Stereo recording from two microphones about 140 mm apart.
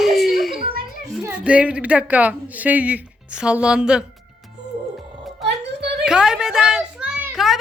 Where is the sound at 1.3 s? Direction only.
10° right (ahead or behind).